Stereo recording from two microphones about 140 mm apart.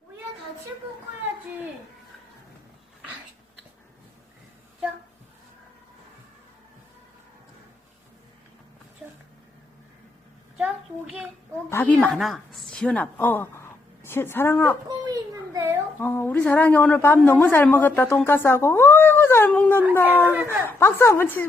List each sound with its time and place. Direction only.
11.7 s speech: 15° left (ahead or behind)
11.9 s a woman's voice: centre (ahead or behind); by 14.8 s 15° left (ahead or behind)
14.8 s a sound: 25° right (ahead or behind)
16.0 s speech: 15° left (ahead or behind)
19.5 s howl: 10° left (ahead or behind)
20.3 s speech: 15° right (ahead or behind)
20.7 s a woman's voice: 20° left (ahead or behind)